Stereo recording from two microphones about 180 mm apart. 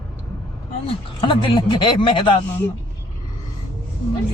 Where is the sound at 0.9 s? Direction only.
30° left (ahead or behind).